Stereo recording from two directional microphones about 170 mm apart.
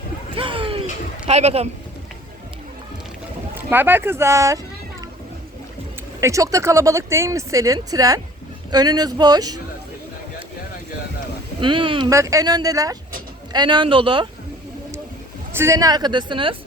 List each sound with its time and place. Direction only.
0.3 s a sound: 30° right (ahead or behind)
1.3 s speech: 40° right (ahead or behind)
3.5 s speech: 10° right (ahead or behind)
6.1 s speech: 20° right (ahead or behind)
11.6 s speech: 30° right (ahead or behind)
15.5 s speech: 15° right (ahead or behind)